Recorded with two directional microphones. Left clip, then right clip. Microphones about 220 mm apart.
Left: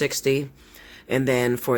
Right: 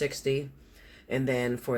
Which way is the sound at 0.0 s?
50° left (ahead or behind).